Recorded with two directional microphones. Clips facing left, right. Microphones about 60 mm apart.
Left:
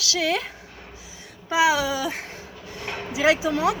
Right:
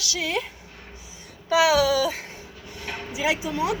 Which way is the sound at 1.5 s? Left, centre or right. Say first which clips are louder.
Right 2 dB; left.